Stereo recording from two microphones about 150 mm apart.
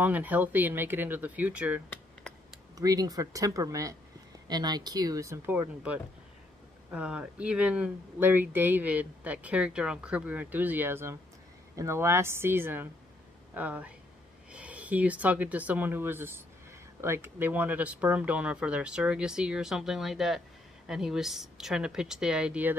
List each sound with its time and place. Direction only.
0.0 s speech: 10° right (ahead or behind)
2.8 s speech: 25° right (ahead or behind)